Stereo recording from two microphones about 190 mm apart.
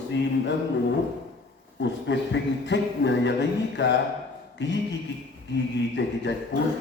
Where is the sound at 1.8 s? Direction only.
70° left (ahead or behind).